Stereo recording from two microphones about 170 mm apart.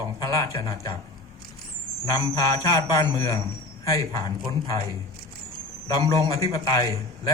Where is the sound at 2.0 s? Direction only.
20° left (ahead or behind).